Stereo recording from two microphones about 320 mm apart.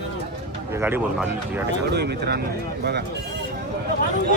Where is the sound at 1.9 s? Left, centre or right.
Right.